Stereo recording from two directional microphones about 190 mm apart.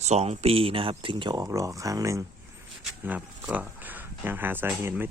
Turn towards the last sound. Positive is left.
turn(degrees=-10)  # may be behind; listen again after turning